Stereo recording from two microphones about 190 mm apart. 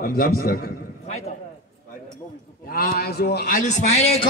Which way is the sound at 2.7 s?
50° left (ahead or behind).